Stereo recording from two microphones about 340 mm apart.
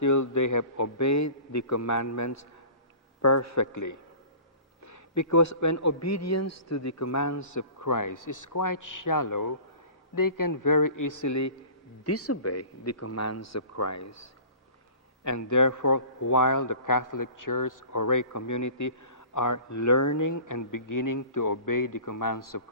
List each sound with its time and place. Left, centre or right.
0.0 s a man's voice: left
12.0 s a man's voice: left